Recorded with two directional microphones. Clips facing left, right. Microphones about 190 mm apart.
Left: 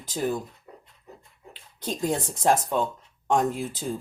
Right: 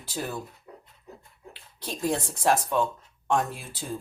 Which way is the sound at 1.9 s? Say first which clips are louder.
Left 1 dB; 20° left (ahead or behind).